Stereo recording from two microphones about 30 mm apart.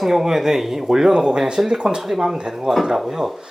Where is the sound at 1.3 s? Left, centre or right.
Right.